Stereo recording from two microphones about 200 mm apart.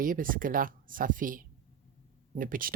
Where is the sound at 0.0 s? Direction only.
45° right (ahead or behind).